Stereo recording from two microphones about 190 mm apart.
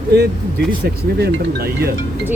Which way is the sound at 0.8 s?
55° right (ahead or behind).